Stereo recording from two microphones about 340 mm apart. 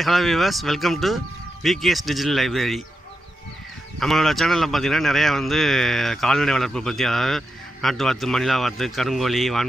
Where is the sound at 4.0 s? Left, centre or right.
Centre.